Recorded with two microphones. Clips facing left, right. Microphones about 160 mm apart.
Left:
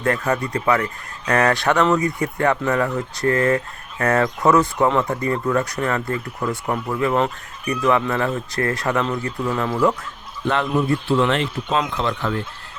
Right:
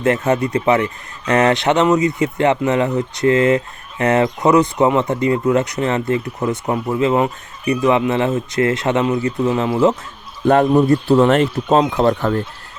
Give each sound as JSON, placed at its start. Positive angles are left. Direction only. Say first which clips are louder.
{"t": 0.0, "sound": "speech", "louder": "right 5 dB", "side_deg": -20}
{"t": 10.4, "sound": "speech", "louder": "right 8 dB", "side_deg": -45}